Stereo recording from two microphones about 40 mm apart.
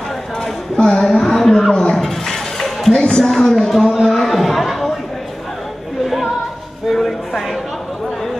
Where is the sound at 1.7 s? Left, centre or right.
Left.